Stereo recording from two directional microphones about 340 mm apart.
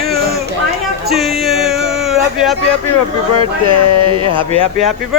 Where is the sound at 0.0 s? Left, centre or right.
Right.